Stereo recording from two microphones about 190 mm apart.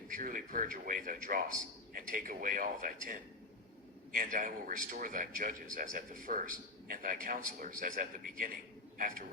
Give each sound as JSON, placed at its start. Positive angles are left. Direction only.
{"t": 0.1, "sound": "a man's voice", "side_deg": -45}
{"t": 4.2, "sound": "a man's voice", "side_deg": -45}